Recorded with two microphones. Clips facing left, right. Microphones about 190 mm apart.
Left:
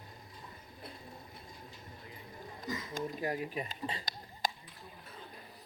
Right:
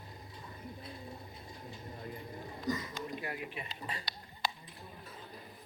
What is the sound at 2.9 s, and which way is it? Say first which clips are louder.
Speech: left 5 dB; 40° left (ahead or behind).